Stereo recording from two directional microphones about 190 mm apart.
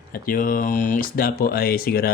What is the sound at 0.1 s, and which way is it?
Speech, 45° left (ahead or behind).